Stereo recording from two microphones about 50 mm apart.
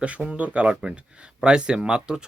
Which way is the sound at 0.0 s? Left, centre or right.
Right.